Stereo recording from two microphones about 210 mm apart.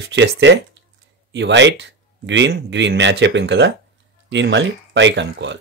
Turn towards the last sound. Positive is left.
turn(degrees=-60)  # may be behind; listen again after turning